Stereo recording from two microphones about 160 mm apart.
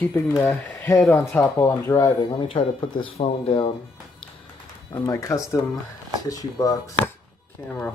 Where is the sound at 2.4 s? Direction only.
30° left (ahead or behind).